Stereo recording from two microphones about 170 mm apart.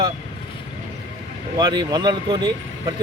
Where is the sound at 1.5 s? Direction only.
25° right (ahead or behind).